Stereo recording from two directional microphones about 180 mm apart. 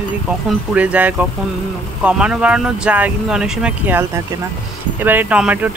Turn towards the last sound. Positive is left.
turn(degrees=-5)  # may be behind; listen again after turning